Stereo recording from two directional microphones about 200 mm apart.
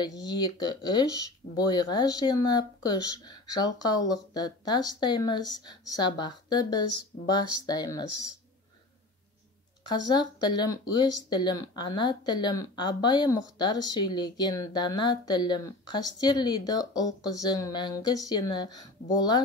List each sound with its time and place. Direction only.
0.0 s speech: 20° left (ahead or behind)
9.8 s speech: 20° left (ahead or behind)